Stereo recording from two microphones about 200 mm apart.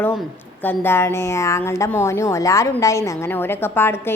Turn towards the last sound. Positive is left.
turn(degrees=10)  # may be behind; listen again after turning